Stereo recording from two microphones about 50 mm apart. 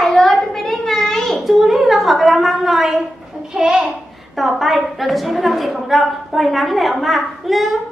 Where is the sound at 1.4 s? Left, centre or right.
Centre.